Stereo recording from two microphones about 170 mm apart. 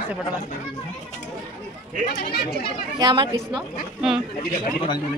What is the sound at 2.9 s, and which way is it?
Speech, 25° right (ahead or behind).